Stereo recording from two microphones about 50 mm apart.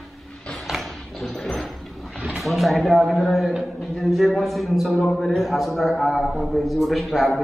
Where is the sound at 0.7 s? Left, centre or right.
Centre.